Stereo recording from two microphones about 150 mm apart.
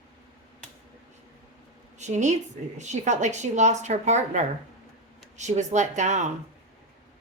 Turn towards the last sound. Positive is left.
turn(degrees=-55)  # may be behind; listen again after turning